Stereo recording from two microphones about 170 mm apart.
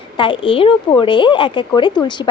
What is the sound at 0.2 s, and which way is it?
A woman's voice, 30° left (ahead or behind).